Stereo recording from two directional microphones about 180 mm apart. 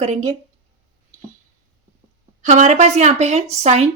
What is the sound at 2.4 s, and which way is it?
A woman's voice, 45° right (ahead or behind).